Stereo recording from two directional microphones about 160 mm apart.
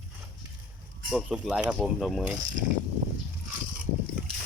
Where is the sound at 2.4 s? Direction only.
55° right (ahead or behind).